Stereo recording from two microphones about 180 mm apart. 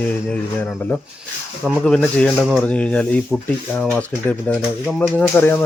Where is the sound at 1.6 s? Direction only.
5° left (ahead or behind).